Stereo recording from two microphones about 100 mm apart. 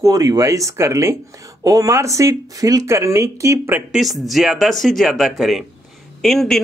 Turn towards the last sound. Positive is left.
turn(degrees=5)  # may be behind; listen again after turning